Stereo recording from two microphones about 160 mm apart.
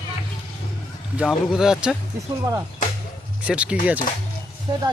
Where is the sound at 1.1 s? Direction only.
5° right (ahead or behind).